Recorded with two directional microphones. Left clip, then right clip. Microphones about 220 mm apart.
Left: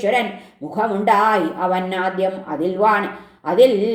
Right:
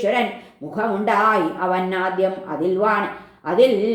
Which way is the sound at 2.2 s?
35° left (ahead or behind).